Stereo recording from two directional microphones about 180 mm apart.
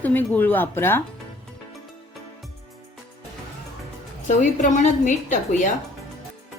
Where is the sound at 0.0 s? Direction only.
10° left (ahead or behind).